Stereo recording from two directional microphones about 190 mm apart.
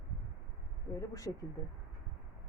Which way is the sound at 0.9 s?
15° left (ahead or behind).